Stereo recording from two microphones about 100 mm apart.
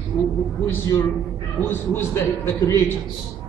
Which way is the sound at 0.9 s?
30° left (ahead or behind).